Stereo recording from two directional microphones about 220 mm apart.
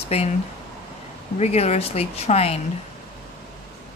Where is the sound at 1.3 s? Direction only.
30° left (ahead or behind).